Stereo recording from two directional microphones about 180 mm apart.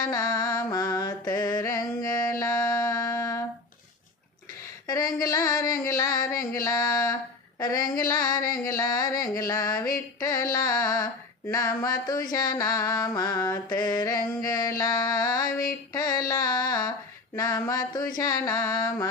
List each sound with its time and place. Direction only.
0.1 s mantra: 20° left (ahead or behind)
2.0 s music: 20° left (ahead or behind)
4.9 s a sound: 20° left (ahead or behind)
7.6 s mantra: 20° left (ahead or behind)